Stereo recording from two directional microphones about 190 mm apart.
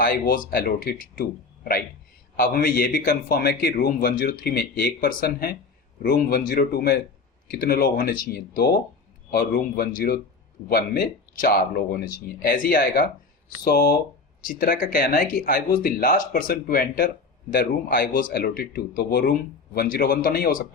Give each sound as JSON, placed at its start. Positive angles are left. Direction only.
{"t": 0.0, "sound": "a man's voice", "side_deg": 50}